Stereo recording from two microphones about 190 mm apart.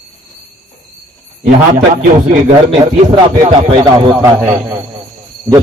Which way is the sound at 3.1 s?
20° right (ahead or behind).